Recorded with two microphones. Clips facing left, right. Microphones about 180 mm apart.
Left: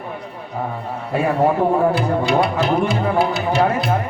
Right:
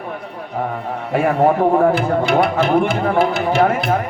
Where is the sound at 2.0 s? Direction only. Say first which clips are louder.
Right 2 dB; 50° right (ahead or behind).